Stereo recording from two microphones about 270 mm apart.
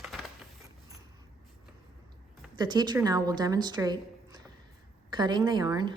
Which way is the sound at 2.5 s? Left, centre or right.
Centre.